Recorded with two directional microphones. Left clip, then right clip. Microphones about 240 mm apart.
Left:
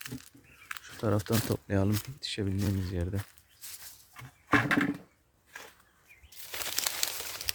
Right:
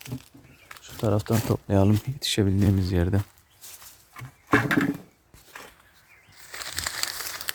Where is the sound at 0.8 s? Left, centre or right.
Centre.